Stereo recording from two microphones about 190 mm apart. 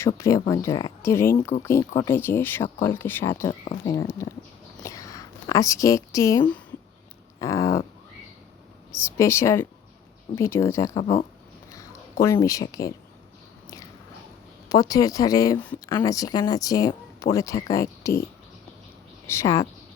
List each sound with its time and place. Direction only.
0.2 s speech: 15° left (ahead or behind)
3.5 s speech: 35° left (ahead or behind)
3.8 s speech: 15° left (ahead or behind)
4.8 s whispering: 15° left (ahead or behind)
7.3 s speech: 15° left (ahead or behind)
9.0 s speech: 15° left (ahead or behind)
12.2 s speech: 15° left (ahead or behind)
14.7 s speech: 20° left (ahead or behind)
15.9 s speech: 20° left (ahead or behind)
19.3 s speech: 15° left (ahead or behind)